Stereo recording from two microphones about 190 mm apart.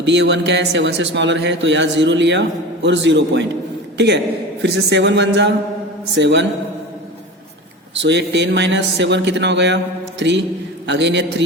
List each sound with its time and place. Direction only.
0.0 s a man's voice: 70° right (ahead or behind)
7.9 s a man's voice: 70° right (ahead or behind)